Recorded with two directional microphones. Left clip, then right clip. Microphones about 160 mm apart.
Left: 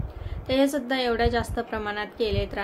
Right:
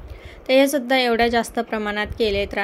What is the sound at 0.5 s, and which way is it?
A woman's voice, 45° right (ahead or behind).